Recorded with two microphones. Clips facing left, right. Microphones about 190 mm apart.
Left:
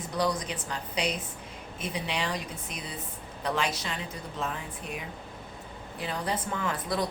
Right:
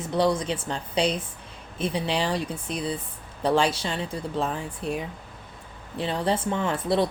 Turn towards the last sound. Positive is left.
turn(degrees=-30)  # may be behind; listen again after turning